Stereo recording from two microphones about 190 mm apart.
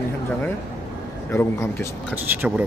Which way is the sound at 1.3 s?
15° left (ahead or behind).